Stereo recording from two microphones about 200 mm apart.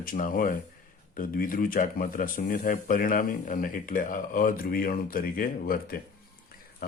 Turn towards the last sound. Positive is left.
turn(degrees=50)  # may be behind; listen again after turning